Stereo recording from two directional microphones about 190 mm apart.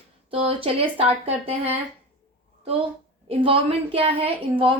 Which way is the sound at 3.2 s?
30° right (ahead or behind).